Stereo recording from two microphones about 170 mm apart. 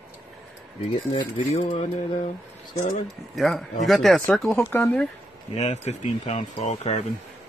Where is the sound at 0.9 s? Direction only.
30° left (ahead or behind).